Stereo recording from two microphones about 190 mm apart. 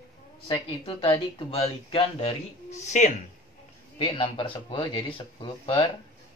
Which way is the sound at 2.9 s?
40° left (ahead or behind).